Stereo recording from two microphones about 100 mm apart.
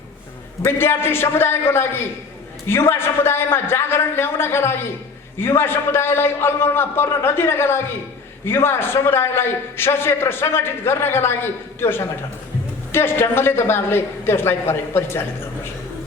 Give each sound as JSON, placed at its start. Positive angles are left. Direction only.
{"t": 0.6, "sound": "a man's voice", "side_deg": 25}